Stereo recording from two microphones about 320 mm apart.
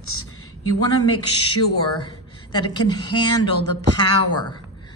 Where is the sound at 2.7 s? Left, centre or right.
Centre.